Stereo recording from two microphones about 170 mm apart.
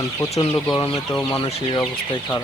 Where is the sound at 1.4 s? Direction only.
30° left (ahead or behind).